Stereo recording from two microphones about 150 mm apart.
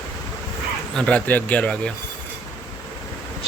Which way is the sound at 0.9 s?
10° left (ahead or behind).